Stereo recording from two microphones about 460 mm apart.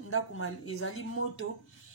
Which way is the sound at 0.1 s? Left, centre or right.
Left.